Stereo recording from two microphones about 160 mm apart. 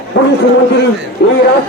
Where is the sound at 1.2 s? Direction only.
90° left.